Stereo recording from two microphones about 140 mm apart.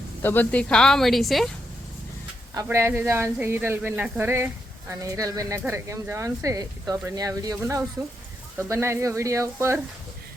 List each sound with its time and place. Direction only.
0.2 s speech: 15° left (ahead or behind)
2.6 s speech: 15° right (ahead or behind)